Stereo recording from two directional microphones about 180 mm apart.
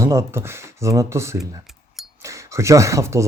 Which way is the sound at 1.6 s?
Centre (ahead or behind).